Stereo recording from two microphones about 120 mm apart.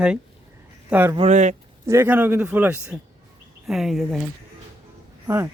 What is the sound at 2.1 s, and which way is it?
Speech, 10° right (ahead or behind).